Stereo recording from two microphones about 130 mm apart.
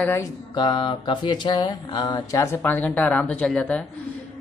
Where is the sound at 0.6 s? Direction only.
40° left (ahead or behind).